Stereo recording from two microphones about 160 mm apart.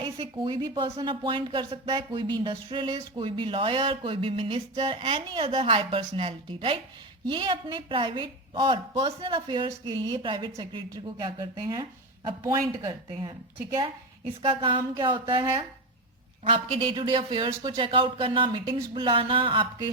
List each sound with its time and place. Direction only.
0.0 s a woman's voice: 30° right (ahead or behind)
14.4 s a woman's voice: 35° right (ahead or behind)
16.4 s a woman's voice: 35° right (ahead or behind)